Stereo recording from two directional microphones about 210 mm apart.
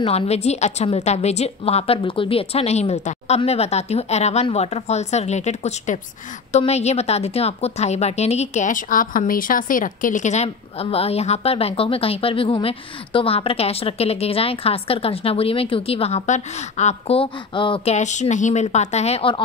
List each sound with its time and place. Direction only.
0.0 s a woman's voice: 30° left (ahead or behind)